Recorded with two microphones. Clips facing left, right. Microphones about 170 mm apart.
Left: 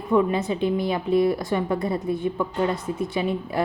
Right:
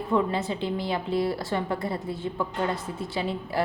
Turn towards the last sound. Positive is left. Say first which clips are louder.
# left 3 dB
turn(degrees=20)  # may be behind; listen again after turning